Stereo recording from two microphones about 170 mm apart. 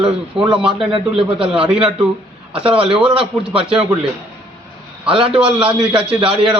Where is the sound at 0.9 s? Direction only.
30° right (ahead or behind).